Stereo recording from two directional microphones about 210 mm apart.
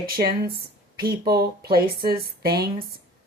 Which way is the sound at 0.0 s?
45° right (ahead or behind).